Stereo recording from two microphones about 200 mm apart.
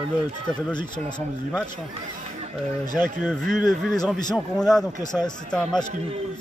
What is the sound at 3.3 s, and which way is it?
Speech, centre (ahead or behind).